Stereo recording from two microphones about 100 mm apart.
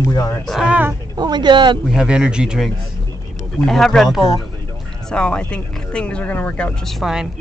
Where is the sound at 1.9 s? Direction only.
5° right (ahead or behind).